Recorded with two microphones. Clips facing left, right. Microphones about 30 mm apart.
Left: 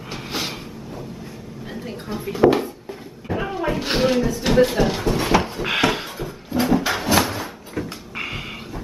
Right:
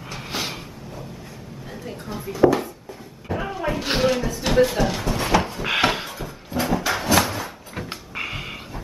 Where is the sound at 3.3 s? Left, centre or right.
Centre.